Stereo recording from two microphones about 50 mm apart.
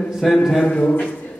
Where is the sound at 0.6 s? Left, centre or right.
Left.